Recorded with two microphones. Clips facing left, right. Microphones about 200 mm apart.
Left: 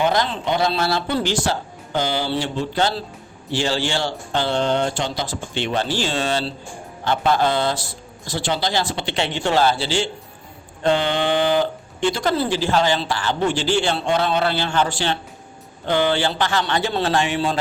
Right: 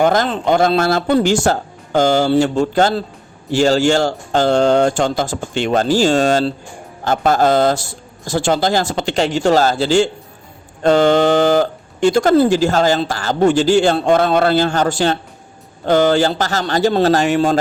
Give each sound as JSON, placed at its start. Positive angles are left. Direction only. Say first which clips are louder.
{"t": 0.0, "sound": "speech", "louder": "right 6 dB", "side_deg": -45}